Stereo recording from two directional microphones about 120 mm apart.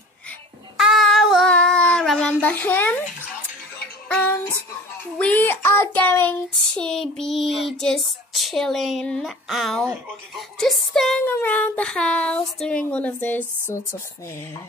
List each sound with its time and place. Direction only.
0.7 s child singing: centre (ahead or behind); by 3.0 s 15° left (ahead or behind)
4.1 s female singing: 15° left (ahead or behind)
5.0 s speech: 10° left (ahead or behind)
6.7 s child singing: 5° left (ahead or behind)
11.2 s speech: 15° left (ahead or behind)